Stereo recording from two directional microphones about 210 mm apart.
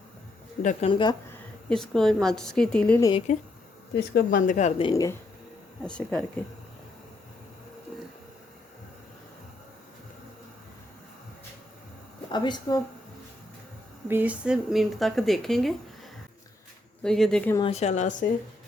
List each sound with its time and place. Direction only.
0.6 s speech: 35° left (ahead or behind)
0.9 s speech: 25° left (ahead or behind)
1.3 s a woman's voice: 5° left (ahead or behind)
3.0 s speech: 25° left (ahead or behind)
3.9 s speech: 50° left (ahead or behind); by 5.1 s 20° left (ahead or behind)
5.8 s speech: 5° left (ahead or behind)
12.3 s speech: 20° left (ahead or behind)
14.1 s speech: 10° right (ahead or behind)
17.0 s speech: centre (ahead or behind)
17.5 s speech: 25° left (ahead or behind)